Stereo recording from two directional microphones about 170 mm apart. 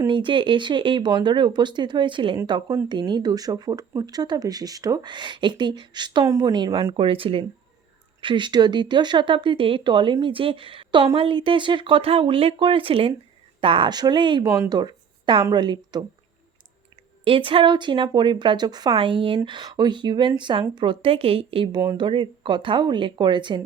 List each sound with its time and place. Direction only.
0.1 s speech: 30° right (ahead or behind)
17.2 s speech: 30° right (ahead or behind)